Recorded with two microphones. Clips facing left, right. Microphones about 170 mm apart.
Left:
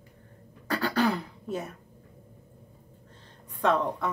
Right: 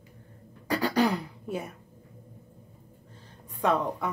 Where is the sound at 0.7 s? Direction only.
15° right (ahead or behind).